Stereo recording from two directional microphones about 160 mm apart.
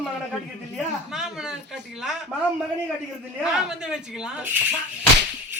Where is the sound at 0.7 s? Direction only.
5° right (ahead or behind).